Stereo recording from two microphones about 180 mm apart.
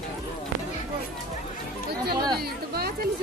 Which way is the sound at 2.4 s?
60° right (ahead or behind).